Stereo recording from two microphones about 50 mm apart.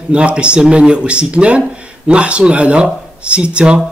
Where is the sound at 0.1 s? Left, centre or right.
Right.